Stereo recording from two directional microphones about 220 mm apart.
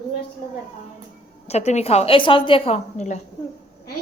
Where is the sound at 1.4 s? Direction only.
30° left (ahead or behind).